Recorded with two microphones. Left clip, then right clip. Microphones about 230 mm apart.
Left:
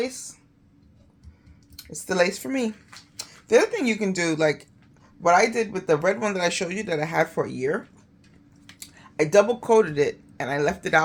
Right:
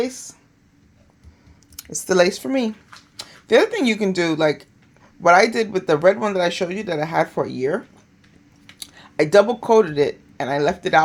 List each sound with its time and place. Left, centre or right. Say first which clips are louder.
2.0 s speech: right 6 dB; right